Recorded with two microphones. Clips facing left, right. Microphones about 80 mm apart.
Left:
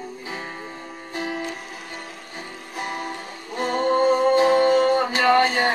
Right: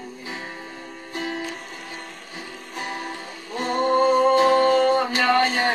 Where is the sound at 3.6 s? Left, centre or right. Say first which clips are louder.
Even; left.